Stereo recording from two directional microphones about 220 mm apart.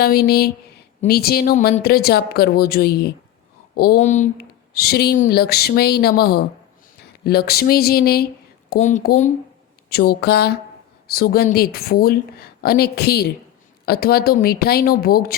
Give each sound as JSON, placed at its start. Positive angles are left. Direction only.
{"t": 0.0, "sound": "speech", "side_deg": 45}
{"t": 8.7, "sound": "speech", "side_deg": 35}
{"t": 9.9, "sound": "speech", "side_deg": 45}